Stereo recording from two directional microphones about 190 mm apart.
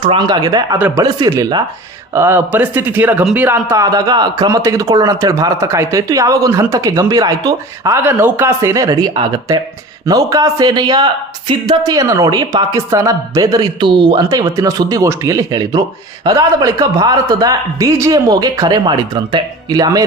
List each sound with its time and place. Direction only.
0.0 s speech: 25° right (ahead or behind)
0.8 s speech: 10° right (ahead or behind)